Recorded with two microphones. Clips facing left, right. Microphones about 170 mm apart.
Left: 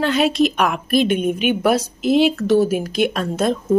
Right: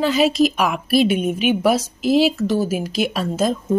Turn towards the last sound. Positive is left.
turn(degrees=-5)  # may be behind; listen again after turning